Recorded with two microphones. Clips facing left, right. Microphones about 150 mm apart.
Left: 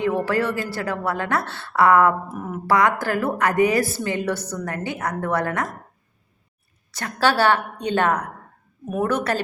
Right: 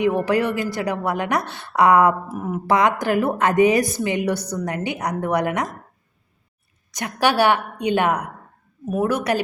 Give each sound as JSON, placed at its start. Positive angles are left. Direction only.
{"t": 0.0, "sound": "a woman's voice", "side_deg": -15}
{"t": 2.6, "sound": "a woman's voice", "side_deg": -20}
{"t": 6.9, "sound": "a woman's voice", "side_deg": -15}